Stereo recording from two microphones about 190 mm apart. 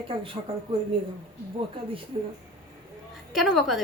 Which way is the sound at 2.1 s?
30° right (ahead or behind).